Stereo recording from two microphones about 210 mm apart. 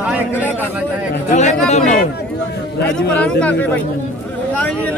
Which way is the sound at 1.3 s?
35° left (ahead or behind).